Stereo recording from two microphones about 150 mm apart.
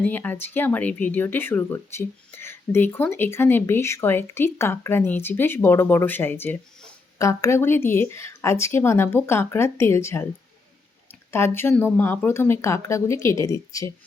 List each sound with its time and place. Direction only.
0.0 s speech: 10° left (ahead or behind)
11.3 s speech: 15° left (ahead or behind)